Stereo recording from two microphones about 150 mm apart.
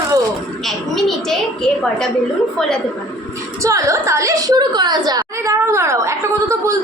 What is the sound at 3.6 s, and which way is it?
A woman's voice, 20° right (ahead or behind).